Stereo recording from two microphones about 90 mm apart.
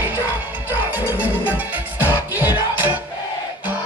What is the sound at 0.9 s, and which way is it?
Music, 20° right (ahead or behind).